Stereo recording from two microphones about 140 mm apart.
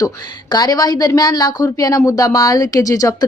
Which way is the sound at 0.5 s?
25° left (ahead or behind).